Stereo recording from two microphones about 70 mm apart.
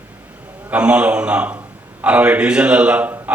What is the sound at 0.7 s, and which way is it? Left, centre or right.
A man's voice, centre.